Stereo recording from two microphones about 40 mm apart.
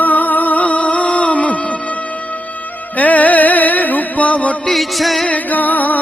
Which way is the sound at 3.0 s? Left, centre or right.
Left.